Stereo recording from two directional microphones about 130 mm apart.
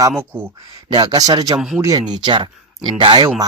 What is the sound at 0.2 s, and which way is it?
Speech, 15° right (ahead or behind).